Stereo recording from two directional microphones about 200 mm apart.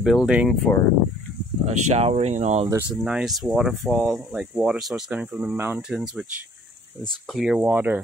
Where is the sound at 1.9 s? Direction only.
30° right (ahead or behind).